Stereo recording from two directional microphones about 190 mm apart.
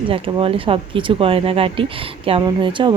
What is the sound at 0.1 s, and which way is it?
Speech, 30° right (ahead or behind).